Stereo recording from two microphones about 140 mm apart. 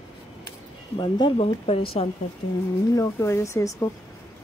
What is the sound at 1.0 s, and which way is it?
Speech, 35° left (ahead or behind).